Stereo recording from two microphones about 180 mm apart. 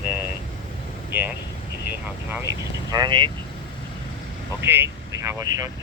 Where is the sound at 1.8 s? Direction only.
10° right (ahead or behind).